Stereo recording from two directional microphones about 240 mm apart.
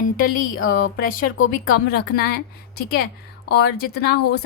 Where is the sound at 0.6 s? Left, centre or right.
Left.